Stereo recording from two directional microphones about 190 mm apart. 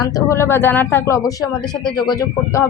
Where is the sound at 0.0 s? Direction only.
15° left (ahead or behind).